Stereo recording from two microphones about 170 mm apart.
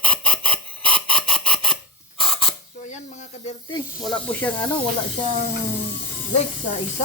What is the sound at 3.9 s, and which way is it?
Snake, centre (ahead or behind).